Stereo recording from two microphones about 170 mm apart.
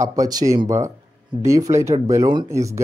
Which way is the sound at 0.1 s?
20° right (ahead or behind).